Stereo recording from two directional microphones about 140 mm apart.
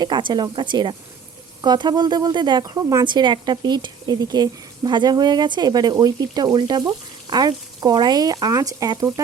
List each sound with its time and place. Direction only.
0.0 s speech: 35° right (ahead or behind)